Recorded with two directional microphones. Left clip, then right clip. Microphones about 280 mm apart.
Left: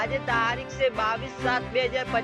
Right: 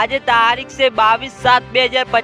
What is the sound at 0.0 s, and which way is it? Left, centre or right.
Speech, right.